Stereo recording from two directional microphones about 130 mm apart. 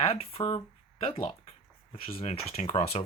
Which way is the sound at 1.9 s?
45° left (ahead or behind).